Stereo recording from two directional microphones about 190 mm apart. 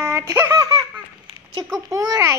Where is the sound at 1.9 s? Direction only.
15° right (ahead or behind).